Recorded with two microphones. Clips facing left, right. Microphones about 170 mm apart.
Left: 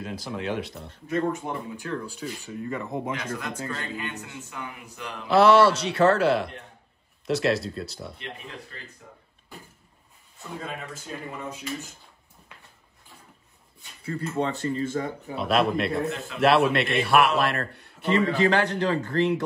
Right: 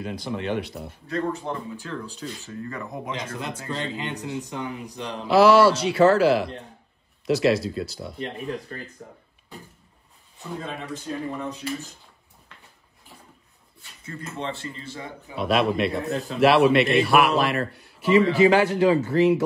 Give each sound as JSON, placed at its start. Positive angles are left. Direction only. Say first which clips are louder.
{"t": 0.0, "sound": "a man's voice", "louder": "right 2 dB", "side_deg": 0}
{"t": 1.0, "sound": "speech", "louder": "left 1 dB", "side_deg": 20}
{"t": 3.1, "sound": "a man's voice", "louder": "even", "side_deg": -30}
{"t": 5.3, "sound": "a man's voice", "louder": "right 2 dB", "side_deg": 0}
{"t": 9.0, "sound": "speech", "louder": "right 6 dB", "side_deg": -45}
{"t": 10.5, "sound": "a man's voice", "louder": "right 3 dB", "side_deg": 0}
{"t": 14.0, "sound": "speech", "louder": "left 5 dB", "side_deg": 35}
{"t": 15.3, "sound": "a man's voice", "louder": "right 1 dB", "side_deg": 0}